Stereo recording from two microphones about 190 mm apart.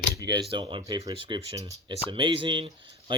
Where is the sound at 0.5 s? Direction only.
25° right (ahead or behind).